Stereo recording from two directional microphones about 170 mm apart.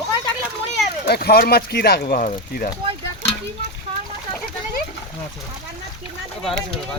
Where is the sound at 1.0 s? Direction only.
70° left (ahead or behind).